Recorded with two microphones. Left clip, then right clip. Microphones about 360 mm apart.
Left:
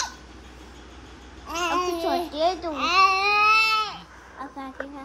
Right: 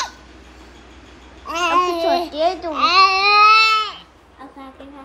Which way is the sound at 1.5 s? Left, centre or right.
Centre.